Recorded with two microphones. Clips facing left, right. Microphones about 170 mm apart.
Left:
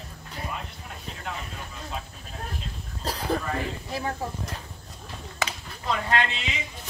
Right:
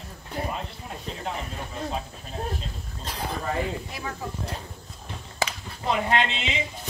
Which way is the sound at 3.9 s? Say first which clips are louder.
Left 5 dB; 40° left (ahead or behind).